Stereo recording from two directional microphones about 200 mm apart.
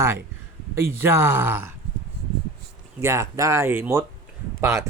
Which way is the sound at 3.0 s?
15° right (ahead or behind).